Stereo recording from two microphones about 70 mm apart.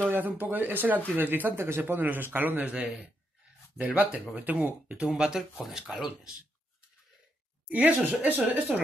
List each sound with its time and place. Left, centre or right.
0.0 s speech: right; by 6.3 s centre
7.7 s speech: right